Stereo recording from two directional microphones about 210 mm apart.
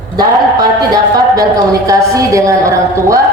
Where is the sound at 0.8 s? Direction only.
20° right (ahead or behind).